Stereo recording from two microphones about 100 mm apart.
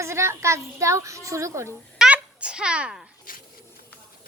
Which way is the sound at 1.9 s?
10° right (ahead or behind).